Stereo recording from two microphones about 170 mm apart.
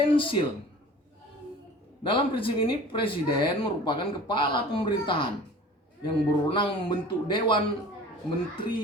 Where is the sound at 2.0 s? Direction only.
30° left (ahead or behind).